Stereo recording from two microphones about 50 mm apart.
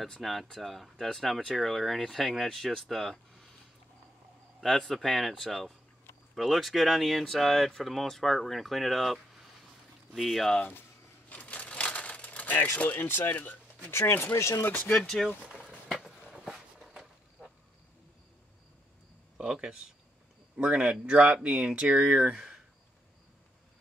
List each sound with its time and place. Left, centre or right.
0.0 s speech: centre
4.6 s speech: centre
11.2 s a sound: left
12.7 s speech: left
13.0 s speech: left
13.9 s speech: left
15.0 s speech: centre
15.4 s a sound: centre
19.3 s speech: centre